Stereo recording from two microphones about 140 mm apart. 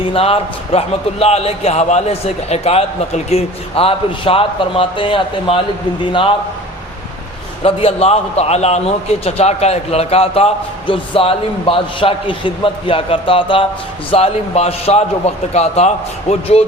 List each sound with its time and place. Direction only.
0.0 s a man's voice: 40° left (ahead or behind)
7.6 s a man's voice: 45° left (ahead or behind)
14.1 s a man's voice: 50° left (ahead or behind)